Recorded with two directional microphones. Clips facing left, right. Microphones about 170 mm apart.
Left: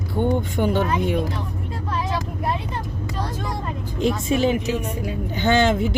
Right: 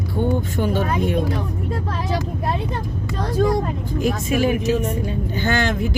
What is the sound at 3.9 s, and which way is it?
Speech, 25° left (ahead or behind).